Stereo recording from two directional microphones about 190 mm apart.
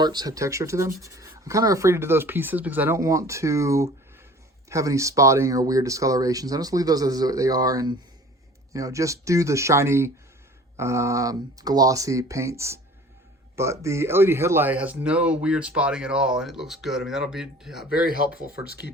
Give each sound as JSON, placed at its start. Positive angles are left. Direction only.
{"t": 0.0, "sound": "speech", "side_deg": -20}
{"t": 18.1, "sound": "speech", "side_deg": -50}